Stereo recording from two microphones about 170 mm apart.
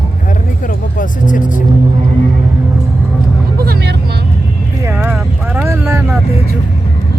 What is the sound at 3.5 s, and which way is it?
Vehicle, 70° right (ahead or behind).